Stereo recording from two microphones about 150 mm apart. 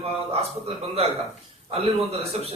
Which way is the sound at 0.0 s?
40° right (ahead or behind).